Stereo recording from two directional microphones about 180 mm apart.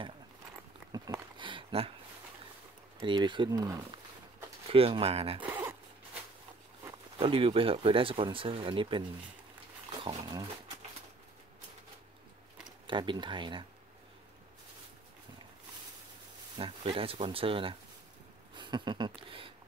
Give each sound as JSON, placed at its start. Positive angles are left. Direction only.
{"t": 0.9, "sound": "a sound", "side_deg": -20}
{"t": 3.0, "sound": "speech", "side_deg": -25}
{"t": 4.6, "sound": "speech", "side_deg": -30}
{"t": 5.4, "sound": "a sound", "side_deg": -15}
{"t": 7.2, "sound": "speech", "side_deg": -30}
{"t": 10.0, "sound": "speech", "side_deg": -25}
{"t": 12.8, "sound": "speech", "side_deg": -25}
{"t": 16.5, "sound": "speech", "side_deg": -30}